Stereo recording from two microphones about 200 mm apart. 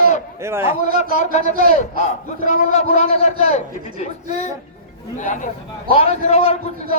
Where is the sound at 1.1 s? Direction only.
35° left (ahead or behind).